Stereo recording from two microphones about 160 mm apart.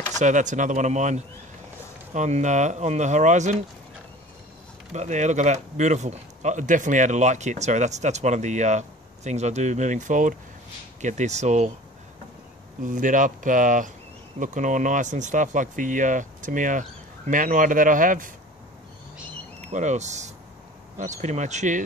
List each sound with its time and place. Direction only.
0.2 s speech: 50° right (ahead or behind)
4.9 s speech: 45° right (ahead or behind)
12.8 s speech: 55° right (ahead or behind)
19.7 s speech: 45° right (ahead or behind)